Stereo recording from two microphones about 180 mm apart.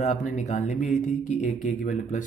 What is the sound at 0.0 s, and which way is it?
Speech, 40° left (ahead or behind).